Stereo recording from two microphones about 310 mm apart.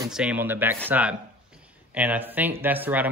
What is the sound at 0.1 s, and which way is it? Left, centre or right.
Speech, centre.